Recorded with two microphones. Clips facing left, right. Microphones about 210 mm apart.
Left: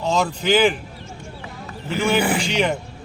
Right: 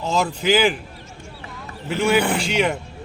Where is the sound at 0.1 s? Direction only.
Centre (ahead or behind).